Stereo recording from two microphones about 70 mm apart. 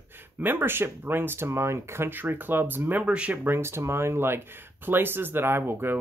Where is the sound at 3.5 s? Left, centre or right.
Right.